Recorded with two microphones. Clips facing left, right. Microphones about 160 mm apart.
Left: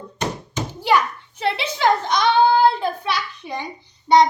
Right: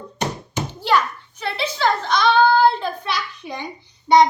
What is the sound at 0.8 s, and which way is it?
Bouncing, 15° left (ahead or behind).